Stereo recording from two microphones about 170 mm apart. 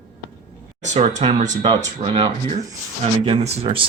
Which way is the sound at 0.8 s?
40° right (ahead or behind).